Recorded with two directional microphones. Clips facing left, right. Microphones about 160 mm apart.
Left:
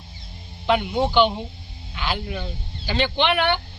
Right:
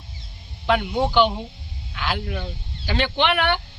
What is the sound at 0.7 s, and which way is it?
Speech, centre (ahead or behind).